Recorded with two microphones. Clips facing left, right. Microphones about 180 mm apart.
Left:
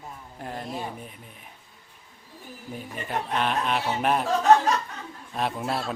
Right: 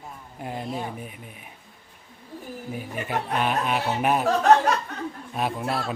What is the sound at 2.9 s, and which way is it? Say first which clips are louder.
Speech: right 1 dB; 5° right (ahead or behind).